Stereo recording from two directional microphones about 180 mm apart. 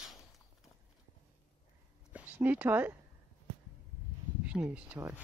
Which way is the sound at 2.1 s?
10° right (ahead or behind).